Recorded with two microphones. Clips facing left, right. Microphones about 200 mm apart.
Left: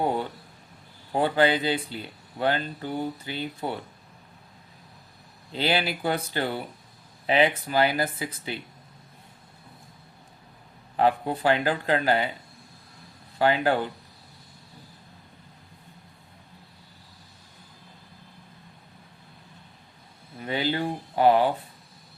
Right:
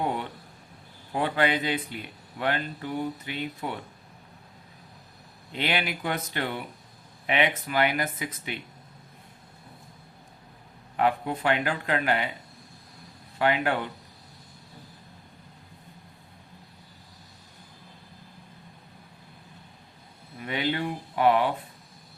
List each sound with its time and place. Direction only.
1.1 s speech: 30° left (ahead or behind)
5.5 s speech: 30° left (ahead or behind)
10.9 s speech: 30° left (ahead or behind)
13.4 s speech: 30° left (ahead or behind)
20.4 s speech: 30° left (ahead or behind)